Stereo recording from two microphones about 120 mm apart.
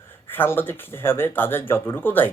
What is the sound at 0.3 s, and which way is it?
Speech, 15° left (ahead or behind).